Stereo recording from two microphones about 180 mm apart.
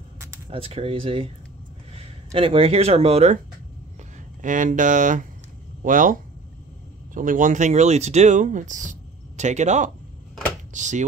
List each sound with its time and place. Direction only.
0.5 s speech: 30° right (ahead or behind)
4.4 s speech: 45° right (ahead or behind)
7.2 s speech: 45° right (ahead or behind)